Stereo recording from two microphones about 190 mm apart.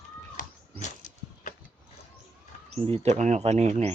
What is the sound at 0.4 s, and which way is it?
Cat, 45° left (ahead or behind).